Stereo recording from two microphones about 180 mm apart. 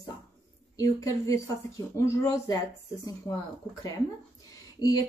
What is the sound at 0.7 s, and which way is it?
Speech, 20° left (ahead or behind).